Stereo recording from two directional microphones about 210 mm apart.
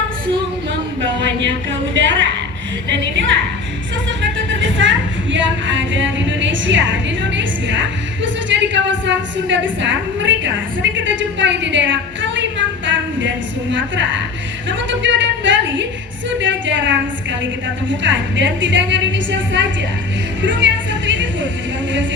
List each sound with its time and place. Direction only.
1.0 s music: 60° right (ahead or behind)
10.9 s a woman's voice: 60° right (ahead or behind)
14.7 s music: 60° right (ahead or behind)